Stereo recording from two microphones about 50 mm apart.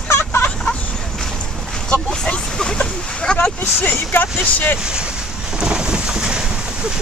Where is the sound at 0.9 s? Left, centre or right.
Centre.